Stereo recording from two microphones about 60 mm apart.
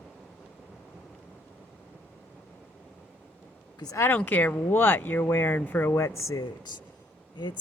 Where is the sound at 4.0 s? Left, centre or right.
Left.